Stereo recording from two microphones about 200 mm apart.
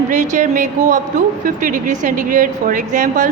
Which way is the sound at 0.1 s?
40° right (ahead or behind).